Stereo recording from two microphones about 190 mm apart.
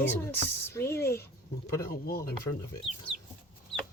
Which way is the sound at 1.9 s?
50° left (ahead or behind).